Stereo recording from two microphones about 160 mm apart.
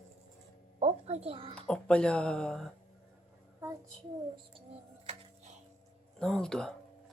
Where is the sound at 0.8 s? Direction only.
45° right (ahead or behind).